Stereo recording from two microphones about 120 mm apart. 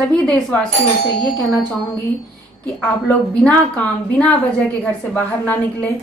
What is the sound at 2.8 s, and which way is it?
Speech, 10° left (ahead or behind).